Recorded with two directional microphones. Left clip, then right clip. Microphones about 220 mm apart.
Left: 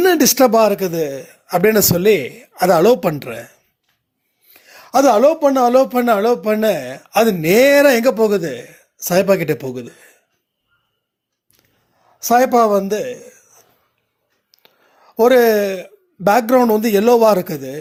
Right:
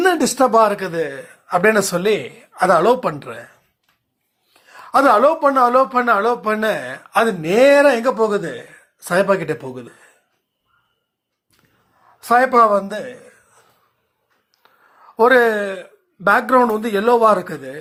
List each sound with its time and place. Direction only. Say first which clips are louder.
0.0 s speech: left 3 dB; 55° left (ahead or behind)
4.6 s speech: left 1 dB; 60° left (ahead or behind)
12.3 s speech: even; 50° left (ahead or behind)
12.9 s a sound: left 6 dB; 45° left (ahead or behind)
15.2 s speech: left 2 dB; 55° left (ahead or behind)